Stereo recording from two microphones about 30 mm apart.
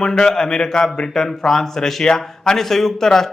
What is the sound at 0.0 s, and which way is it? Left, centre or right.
A man's voice, centre.